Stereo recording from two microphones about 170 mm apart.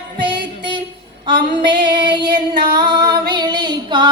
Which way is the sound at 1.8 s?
25° right (ahead or behind).